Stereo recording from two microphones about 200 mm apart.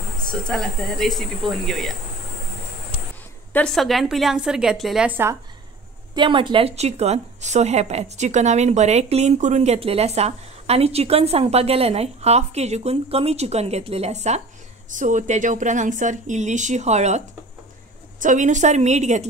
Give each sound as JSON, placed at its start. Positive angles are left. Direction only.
{"t": 0.2, "sound": "a woman's voice", "side_deg": 5}
{"t": 3.5, "sound": "a woman's voice", "side_deg": 5}
{"t": 6.1, "sound": "speech", "side_deg": -25}
{"t": 18.2, "sound": "speech", "side_deg": -40}